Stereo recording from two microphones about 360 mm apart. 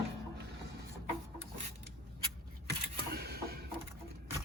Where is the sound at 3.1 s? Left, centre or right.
Right.